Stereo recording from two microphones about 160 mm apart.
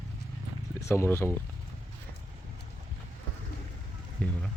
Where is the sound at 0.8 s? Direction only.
15° left (ahead or behind).